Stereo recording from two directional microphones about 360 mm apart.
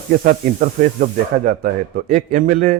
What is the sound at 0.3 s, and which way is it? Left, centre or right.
A man's voice, right.